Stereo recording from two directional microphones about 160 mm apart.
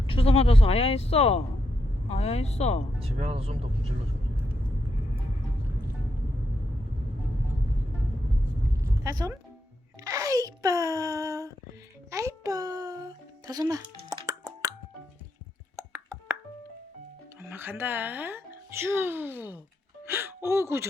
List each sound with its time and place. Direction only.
0.0 s speech: 35° left (ahead or behind)
3.0 s speech: 40° right (ahead or behind)
8.8 s a sound: 20° right (ahead or behind)
10.0 s music: 20° right (ahead or behind)
15.7 s a sound: 15° right (ahead or behind)
17.4 s a child's voice: 15° right (ahead or behind)